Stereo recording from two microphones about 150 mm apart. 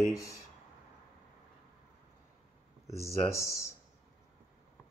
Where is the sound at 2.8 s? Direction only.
20° left (ahead or behind).